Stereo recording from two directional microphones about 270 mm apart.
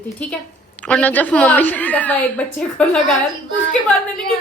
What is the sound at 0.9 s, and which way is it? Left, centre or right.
A woman's voice, centre.